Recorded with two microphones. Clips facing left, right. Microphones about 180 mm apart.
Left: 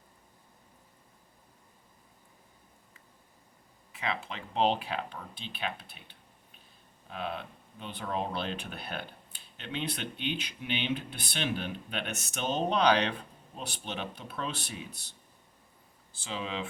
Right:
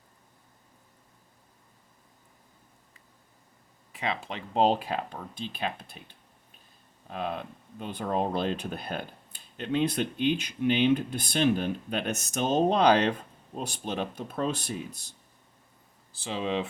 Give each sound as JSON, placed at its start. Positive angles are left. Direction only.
{"t": 4.0, "sound": "speech", "side_deg": -35}
{"t": 16.2, "sound": "speech", "side_deg": -30}